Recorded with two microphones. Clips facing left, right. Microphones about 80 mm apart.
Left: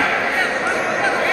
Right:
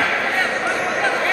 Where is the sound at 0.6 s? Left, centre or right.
Centre.